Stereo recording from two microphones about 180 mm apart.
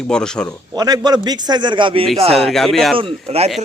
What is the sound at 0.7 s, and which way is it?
A man's voice, 20° right (ahead or behind).